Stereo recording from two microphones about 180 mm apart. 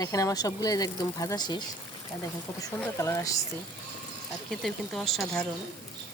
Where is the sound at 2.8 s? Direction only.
15° left (ahead or behind).